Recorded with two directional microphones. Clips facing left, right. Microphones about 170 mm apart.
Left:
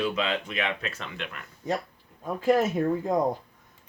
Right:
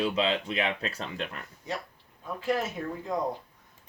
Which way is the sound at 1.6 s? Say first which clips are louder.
Left 7 dB; 50° left (ahead or behind).